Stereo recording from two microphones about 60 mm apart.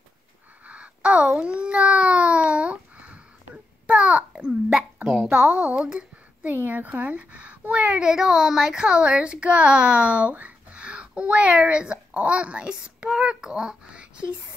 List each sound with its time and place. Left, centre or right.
0.7 s a sound: centre
5.0 s a woman's voice: centre
6.4 s speech: right
8.1 s a child's voice: centre